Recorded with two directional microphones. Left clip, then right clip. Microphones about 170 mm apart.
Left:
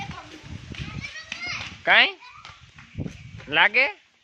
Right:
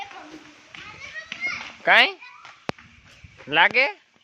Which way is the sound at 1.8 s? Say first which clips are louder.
Right 1 dB; 10° right (ahead or behind).